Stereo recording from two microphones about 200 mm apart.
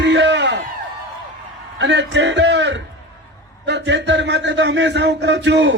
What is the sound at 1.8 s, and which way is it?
A man's voice, 60° right (ahead or behind).